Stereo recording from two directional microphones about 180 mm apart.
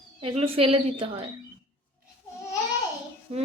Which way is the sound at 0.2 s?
30° right (ahead or behind).